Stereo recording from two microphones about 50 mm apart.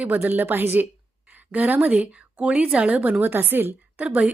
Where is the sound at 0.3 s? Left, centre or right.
Right.